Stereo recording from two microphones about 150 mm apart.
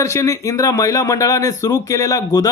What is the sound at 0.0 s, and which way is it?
Speech, 20° left (ahead or behind).